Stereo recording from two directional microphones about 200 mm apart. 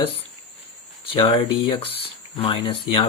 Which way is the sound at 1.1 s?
30° left (ahead or behind).